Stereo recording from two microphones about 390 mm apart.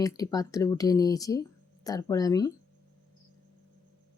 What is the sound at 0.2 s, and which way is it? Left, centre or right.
Speech, centre.